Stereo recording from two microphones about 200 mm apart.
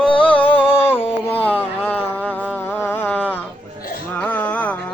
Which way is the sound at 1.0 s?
30° left (ahead or behind).